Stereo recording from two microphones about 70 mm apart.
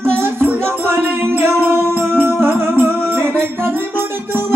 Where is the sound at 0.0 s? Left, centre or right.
Right.